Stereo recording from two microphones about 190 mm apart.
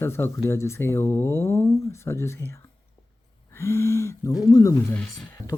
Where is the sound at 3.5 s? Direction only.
15° left (ahead or behind).